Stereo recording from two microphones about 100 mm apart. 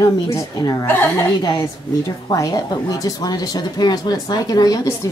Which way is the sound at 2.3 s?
35° left (ahead or behind).